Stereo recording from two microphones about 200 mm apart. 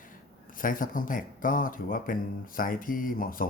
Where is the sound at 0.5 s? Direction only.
45° left (ahead or behind).